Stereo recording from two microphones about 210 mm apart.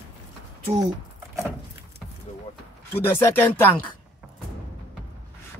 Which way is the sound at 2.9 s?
10° left (ahead or behind).